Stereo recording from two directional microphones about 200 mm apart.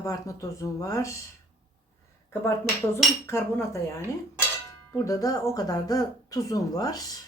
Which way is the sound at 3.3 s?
15° left (ahead or behind).